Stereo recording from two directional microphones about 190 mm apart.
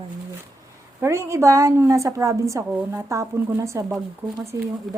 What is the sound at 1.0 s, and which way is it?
A woman's voice, 15° right (ahead or behind).